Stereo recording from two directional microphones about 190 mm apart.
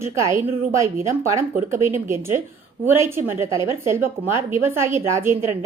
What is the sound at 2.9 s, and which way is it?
A woman's voice, 15° right (ahead or behind).